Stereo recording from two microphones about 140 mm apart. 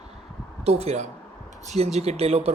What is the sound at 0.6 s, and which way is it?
Speech, 50° right (ahead or behind).